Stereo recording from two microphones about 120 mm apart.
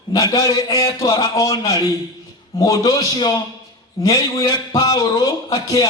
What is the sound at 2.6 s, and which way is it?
A man's voice, 30° left (ahead or behind).